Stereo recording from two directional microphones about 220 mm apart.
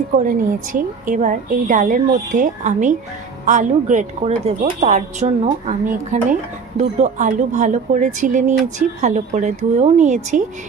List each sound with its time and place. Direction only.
0.2 s a woman's voice: 35° right (ahead or behind)